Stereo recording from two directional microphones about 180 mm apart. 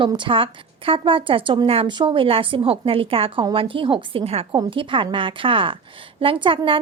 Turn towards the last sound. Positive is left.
turn(degrees=-30)  # may be behind; listen again after turning